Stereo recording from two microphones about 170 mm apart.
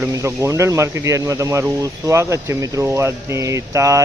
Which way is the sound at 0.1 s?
15° right (ahead or behind).